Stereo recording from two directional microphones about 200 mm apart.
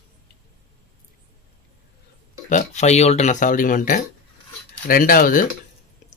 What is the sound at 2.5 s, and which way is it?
Speech, 35° left (ahead or behind).